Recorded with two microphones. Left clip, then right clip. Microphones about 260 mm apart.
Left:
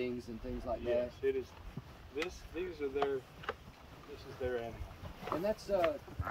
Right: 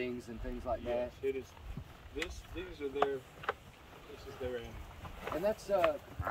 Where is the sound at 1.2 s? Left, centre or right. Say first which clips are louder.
Left 3 dB; centre.